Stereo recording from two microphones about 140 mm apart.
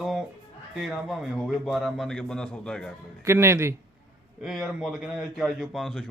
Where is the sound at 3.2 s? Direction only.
20° right (ahead or behind).